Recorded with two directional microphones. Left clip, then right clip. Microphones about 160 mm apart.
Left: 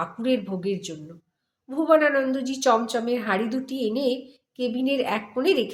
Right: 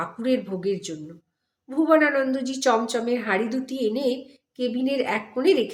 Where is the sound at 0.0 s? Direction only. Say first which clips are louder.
Even; 5° right (ahead or behind).